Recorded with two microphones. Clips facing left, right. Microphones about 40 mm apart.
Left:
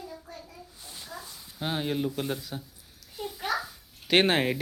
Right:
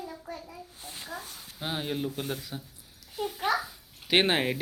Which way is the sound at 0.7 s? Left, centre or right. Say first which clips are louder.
Right 2 dB; right.